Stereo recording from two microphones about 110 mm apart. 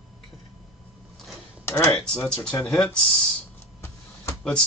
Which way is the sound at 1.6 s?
25° left (ahead or behind).